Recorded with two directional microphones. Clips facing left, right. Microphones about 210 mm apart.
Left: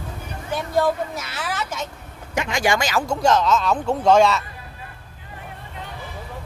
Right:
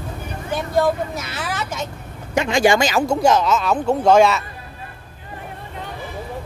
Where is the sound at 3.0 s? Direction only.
10° right (ahead or behind).